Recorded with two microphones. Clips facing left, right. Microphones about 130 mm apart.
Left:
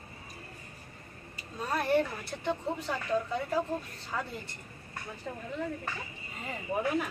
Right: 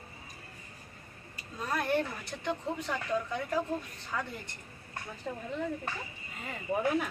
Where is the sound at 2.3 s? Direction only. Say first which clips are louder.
Left 2 dB; 20° left (ahead or behind).